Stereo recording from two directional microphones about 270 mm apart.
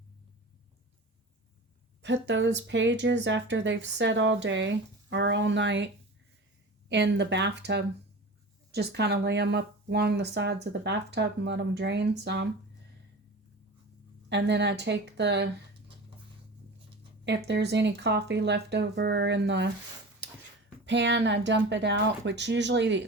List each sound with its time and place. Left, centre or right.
2.0 s speech: right
14.3 s speech: right
17.2 s speech: right
20.2 s dog: right
20.8 s speech: right